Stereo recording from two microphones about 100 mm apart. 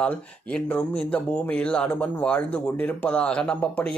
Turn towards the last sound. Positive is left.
turn(degrees=10)  # may be behind; listen again after turning